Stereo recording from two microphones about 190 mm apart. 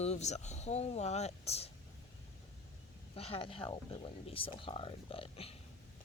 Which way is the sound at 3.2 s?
30° left (ahead or behind).